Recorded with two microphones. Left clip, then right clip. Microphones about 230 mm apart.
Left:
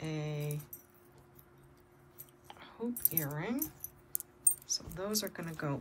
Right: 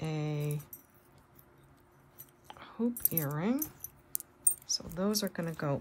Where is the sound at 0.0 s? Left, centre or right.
Right.